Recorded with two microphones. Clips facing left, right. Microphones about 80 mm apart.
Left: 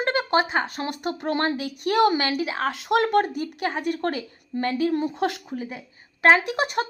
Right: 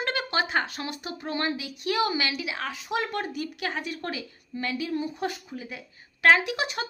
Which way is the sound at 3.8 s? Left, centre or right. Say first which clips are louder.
Left 7 dB; left.